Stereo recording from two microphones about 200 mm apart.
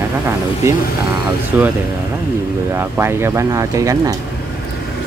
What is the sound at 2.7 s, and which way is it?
Speech, 10° right (ahead or behind).